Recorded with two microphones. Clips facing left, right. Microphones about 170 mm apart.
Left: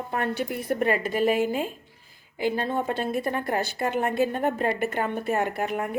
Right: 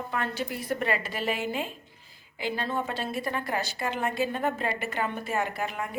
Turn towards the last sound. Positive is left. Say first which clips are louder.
# left 5 dB
turn(degrees=55)  # may be behind; listen again after turning